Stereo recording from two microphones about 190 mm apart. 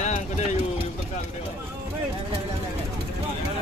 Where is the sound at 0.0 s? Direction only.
40° left (ahead or behind).